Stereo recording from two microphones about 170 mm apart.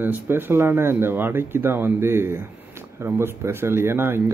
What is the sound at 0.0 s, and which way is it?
A man's voice, 10° right (ahead or behind).